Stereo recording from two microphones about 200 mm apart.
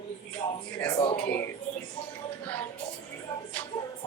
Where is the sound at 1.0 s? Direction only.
30° left (ahead or behind).